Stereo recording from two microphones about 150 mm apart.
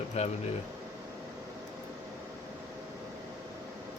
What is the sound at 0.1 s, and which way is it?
Speech, 45° left (ahead or behind).